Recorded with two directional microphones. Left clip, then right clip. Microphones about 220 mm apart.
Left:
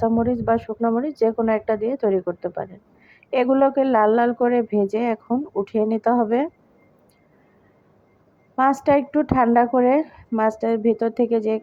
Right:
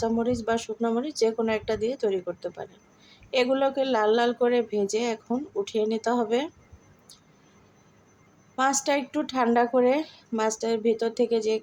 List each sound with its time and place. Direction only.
0.0 s speech: 20° left (ahead or behind)
8.5 s speech: 20° left (ahead or behind)